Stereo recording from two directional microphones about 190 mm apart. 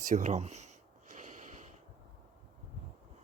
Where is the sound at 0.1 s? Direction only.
40° right (ahead or behind).